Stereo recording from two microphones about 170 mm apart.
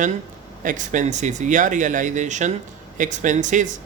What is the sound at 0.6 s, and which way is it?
A man's voice, 50° right (ahead or behind).